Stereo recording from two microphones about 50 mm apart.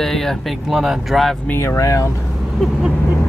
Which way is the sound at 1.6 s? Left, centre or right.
Left.